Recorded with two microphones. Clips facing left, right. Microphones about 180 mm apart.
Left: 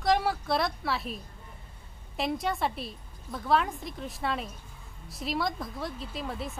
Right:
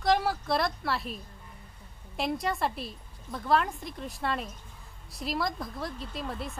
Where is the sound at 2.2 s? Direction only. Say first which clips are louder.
Even; centre (ahead or behind).